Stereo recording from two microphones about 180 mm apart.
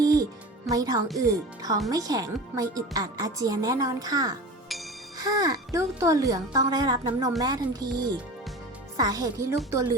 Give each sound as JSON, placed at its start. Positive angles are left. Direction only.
{"t": 0.0, "sound": "music", "side_deg": -20}
{"t": 0.7, "sound": "speech", "side_deg": -20}